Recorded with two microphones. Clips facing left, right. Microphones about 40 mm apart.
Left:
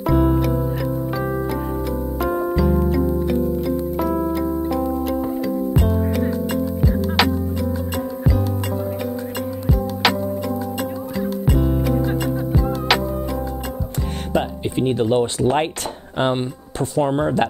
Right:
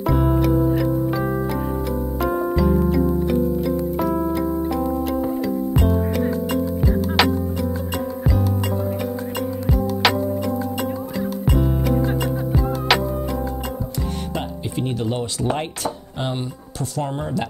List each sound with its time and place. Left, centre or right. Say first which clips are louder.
0.1 s music: left 1 dB; centre
5.8 s music: right 2 dB; centre
11.4 s music: left 1 dB; centre
14.3 s music: left 5 dB; centre
16.9 s speech: left 7 dB; left